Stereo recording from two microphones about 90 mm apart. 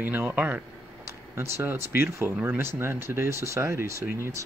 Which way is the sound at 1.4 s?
30° right (ahead or behind).